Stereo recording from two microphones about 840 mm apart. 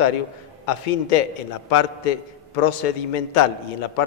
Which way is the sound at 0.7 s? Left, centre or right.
Left.